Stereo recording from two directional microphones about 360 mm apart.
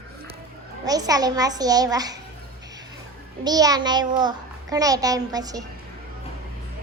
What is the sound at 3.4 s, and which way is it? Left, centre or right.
A woman's voice, centre.